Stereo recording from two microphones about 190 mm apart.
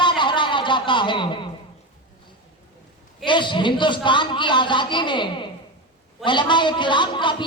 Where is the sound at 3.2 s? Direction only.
25° left (ahead or behind).